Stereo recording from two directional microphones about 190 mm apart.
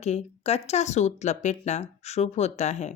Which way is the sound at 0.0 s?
35° left (ahead or behind).